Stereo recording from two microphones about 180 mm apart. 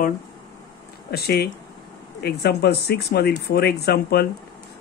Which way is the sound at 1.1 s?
60° left (ahead or behind).